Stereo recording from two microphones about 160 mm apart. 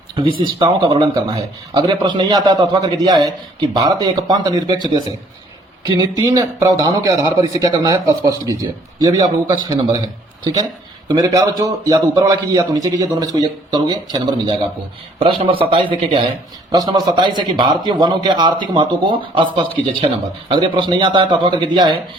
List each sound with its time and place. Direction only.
0.2 s speech: 35° right (ahead or behind)
11.1 s speech: 20° right (ahead or behind)